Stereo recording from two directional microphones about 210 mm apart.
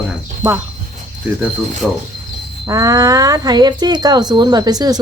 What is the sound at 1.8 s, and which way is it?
Speech, 5° right (ahead or behind).